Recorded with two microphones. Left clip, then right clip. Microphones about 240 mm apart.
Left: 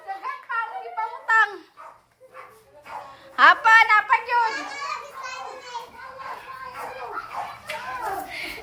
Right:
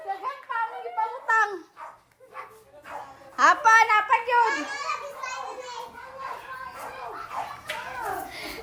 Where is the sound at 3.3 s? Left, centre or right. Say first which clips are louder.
Left 3 dB; centre.